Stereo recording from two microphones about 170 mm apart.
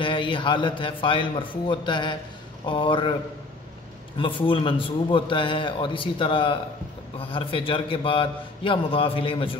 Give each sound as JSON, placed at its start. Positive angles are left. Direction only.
{"t": 0.0, "sound": "a man's voice", "side_deg": 30}
{"t": 4.2, "sound": "a man's voice", "side_deg": 30}